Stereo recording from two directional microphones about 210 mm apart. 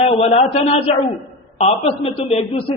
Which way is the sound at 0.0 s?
30° left (ahead or behind).